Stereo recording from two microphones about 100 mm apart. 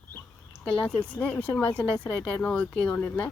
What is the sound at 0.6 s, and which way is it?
A woman's voice, 10° left (ahead or behind).